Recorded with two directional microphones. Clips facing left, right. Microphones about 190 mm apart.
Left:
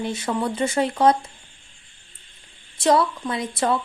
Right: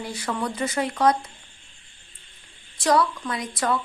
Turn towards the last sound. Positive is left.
turn(degrees=25)  # may be behind; listen again after turning